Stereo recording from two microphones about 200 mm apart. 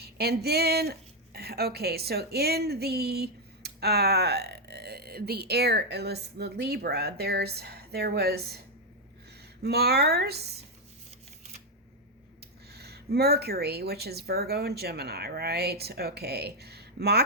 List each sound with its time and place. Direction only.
0.0 s speech: 55° right (ahead or behind)
9.6 s speech: 55° right (ahead or behind)
12.7 s speech: 55° right (ahead or behind)